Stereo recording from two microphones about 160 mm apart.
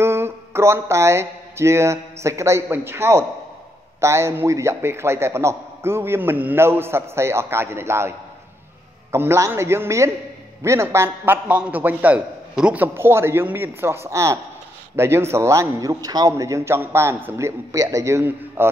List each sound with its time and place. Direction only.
0.0 s a man's voice: 15° right (ahead or behind)
9.1 s a man's voice: 15° right (ahead or behind)